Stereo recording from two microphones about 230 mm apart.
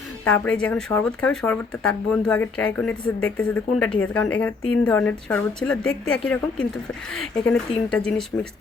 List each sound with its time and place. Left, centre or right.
0.3 s a woman's voice: centre
4.6 s a woman's voice: left
4.9 s speech: centre